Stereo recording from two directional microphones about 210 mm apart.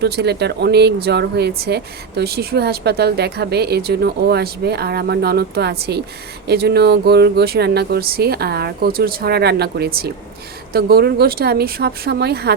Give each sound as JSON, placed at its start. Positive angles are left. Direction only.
{"t": 0.0, "sound": "speech", "side_deg": -50}